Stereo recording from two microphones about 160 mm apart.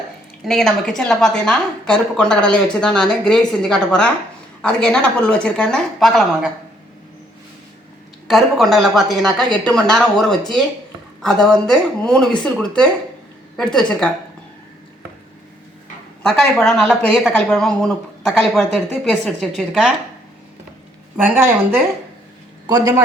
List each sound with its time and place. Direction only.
0.4 s a woman's voice: centre (ahead or behind)
8.3 s a woman's voice: centre (ahead or behind)
16.3 s a woman's voice: 5° left (ahead or behind)
21.2 s speech: 15° right (ahead or behind)
22.6 s a man's voice: 25° right (ahead or behind)